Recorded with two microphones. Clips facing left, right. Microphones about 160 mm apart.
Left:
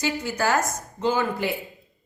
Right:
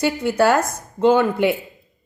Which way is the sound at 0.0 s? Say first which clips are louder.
Right 8 dB; 60° right (ahead or behind).